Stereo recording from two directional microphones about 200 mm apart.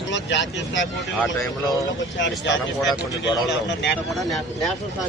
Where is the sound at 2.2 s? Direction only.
65° left (ahead or behind).